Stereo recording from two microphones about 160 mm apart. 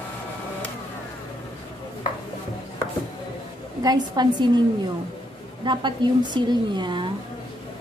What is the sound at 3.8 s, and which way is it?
Speech, 25° right (ahead or behind).